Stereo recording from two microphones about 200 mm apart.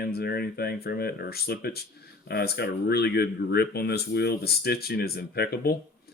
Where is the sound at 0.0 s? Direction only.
50° left (ahead or behind).